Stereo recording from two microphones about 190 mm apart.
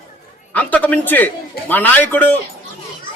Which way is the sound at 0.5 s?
10° left (ahead or behind).